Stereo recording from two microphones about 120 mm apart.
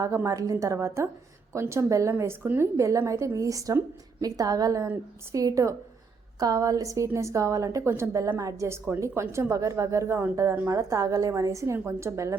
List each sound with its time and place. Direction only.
0.0 s a woman's voice: 25° right (ahead or behind)